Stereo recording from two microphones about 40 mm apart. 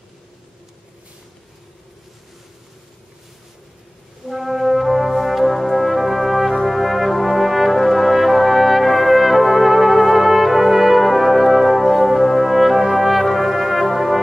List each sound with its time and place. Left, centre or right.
4.3 s brass instrument: centre